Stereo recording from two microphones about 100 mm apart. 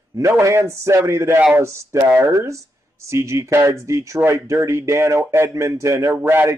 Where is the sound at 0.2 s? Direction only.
30° right (ahead or behind).